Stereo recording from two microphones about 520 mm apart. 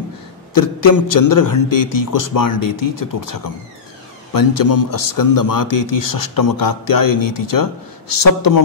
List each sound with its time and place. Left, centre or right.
0.6 s a man's voice: left